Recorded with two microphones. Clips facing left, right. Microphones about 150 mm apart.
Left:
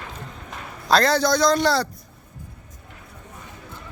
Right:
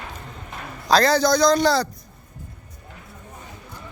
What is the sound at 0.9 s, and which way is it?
A man's voice, centre (ahead or behind).